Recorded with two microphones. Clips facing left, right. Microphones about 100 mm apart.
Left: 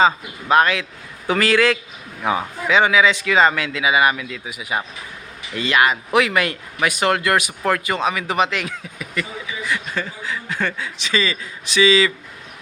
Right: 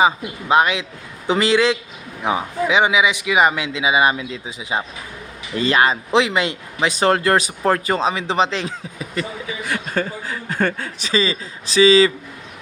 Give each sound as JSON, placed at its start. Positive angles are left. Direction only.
{"t": 0.0, "sound": "a man's voice", "side_deg": -20}
{"t": 9.6, "sound": "speech", "side_deg": -50}
{"t": 11.1, "sound": "a man's voice", "side_deg": -30}